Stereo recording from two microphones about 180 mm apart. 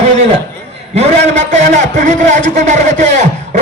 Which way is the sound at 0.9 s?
40° right (ahead or behind).